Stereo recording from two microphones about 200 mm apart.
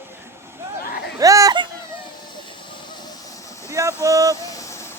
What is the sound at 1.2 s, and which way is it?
Speech, 15° right (ahead or behind).